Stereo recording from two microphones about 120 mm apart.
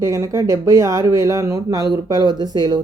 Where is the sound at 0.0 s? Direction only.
25° right (ahead or behind).